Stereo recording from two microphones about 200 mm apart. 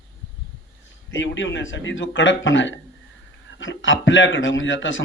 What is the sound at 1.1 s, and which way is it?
A man's voice, 65° left (ahead or behind).